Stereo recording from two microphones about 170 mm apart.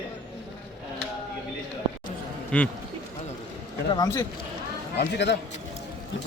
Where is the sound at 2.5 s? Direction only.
10° left (ahead or behind).